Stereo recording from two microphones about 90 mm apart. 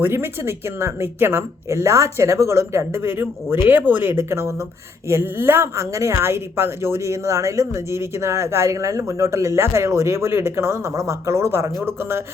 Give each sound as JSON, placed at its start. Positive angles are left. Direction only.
{"t": 0.0, "sound": "a woman's voice", "side_deg": -25}